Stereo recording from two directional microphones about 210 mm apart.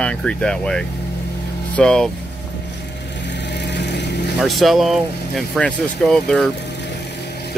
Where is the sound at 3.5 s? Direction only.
55° left (ahead or behind).